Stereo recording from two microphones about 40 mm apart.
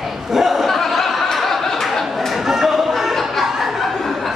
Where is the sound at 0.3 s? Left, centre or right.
Centre.